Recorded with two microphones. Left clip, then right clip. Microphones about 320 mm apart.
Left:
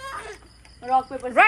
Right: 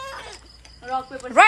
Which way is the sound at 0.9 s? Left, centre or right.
Left.